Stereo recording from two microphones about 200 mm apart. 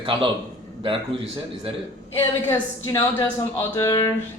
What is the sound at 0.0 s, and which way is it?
Speech, 25° right (ahead or behind).